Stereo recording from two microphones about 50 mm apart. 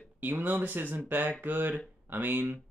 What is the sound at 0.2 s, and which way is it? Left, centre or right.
Speech, right.